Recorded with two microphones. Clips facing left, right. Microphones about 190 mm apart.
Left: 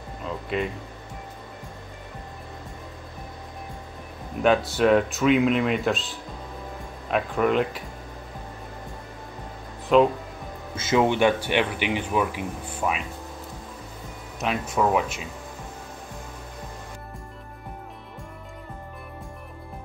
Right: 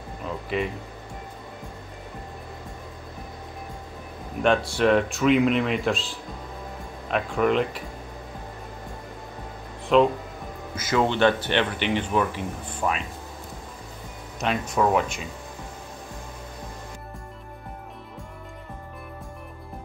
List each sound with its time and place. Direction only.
0.5 s speech: centre (ahead or behind)
4.4 s speech: 5° left (ahead or behind)
9.9 s speech: centre (ahead or behind)
10.8 s speech: 25° left (ahead or behind)
11.1 s speech: 10° left (ahead or behind)
14.4 s speech: 5° left (ahead or behind)